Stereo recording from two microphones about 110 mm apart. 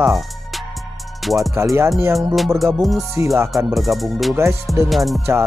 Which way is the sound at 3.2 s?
25° right (ahead or behind).